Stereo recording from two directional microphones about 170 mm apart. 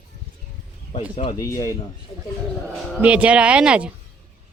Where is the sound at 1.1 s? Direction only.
25° left (ahead or behind).